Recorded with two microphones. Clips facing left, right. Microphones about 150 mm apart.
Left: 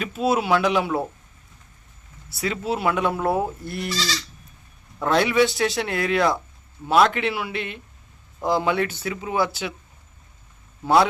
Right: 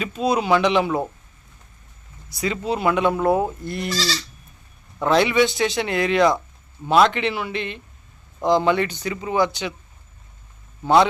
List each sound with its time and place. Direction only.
0.0 s speech: 5° left (ahead or behind)
2.3 s speech: 5° left (ahead or behind)
3.9 s goat: 35° right (ahead or behind)
4.9 s speech: centre (ahead or behind)
10.8 s speech: 5° left (ahead or behind)